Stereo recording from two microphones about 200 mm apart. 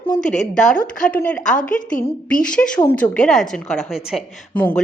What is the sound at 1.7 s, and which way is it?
Speech, 40° left (ahead or behind).